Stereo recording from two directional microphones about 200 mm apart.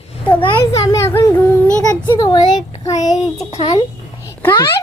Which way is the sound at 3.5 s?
30° left (ahead or behind).